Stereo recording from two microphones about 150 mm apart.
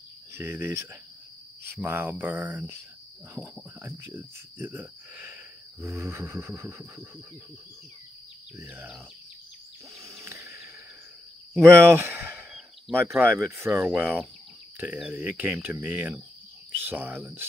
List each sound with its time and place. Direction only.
0.3 s speech: 15° right (ahead or behind)
1.7 s cricket: 15° right (ahead or behind)
3.4 s cricket: centre (ahead or behind)
3.8 s cricket: 15° right (ahead or behind)
8.5 s cricket: 10° right (ahead or behind)
10.0 s a sound: 20° right (ahead or behind)
11.5 s speech: 15° right (ahead or behind)
13.0 s cricket: 15° right (ahead or behind)